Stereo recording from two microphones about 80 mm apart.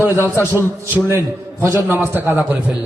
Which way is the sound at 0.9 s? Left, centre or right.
Right.